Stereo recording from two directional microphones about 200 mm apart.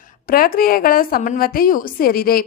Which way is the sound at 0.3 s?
45° left (ahead or behind).